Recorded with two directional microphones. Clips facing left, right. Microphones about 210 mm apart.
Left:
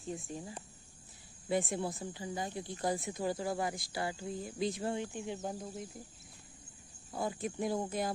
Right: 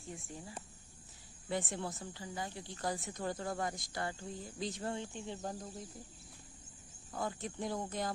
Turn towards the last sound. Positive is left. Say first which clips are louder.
# left 5 dB
turn(degrees=10)  # may be behind; listen again after turning